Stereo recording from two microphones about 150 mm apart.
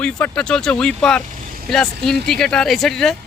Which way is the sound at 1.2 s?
60° right (ahead or behind).